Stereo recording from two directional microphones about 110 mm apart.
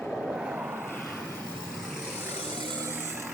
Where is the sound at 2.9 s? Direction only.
20° right (ahead or behind).